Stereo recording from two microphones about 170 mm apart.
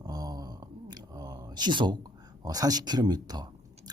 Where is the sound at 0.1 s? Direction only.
20° right (ahead or behind).